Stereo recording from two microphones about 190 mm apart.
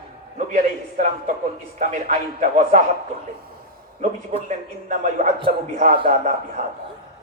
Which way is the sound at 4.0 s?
40° right (ahead or behind).